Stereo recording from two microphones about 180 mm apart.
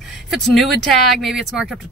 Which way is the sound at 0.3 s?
Centre (ahead or behind).